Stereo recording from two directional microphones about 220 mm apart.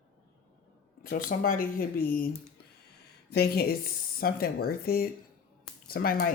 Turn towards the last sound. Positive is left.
turn(degrees=40)  # may be behind; listen again after turning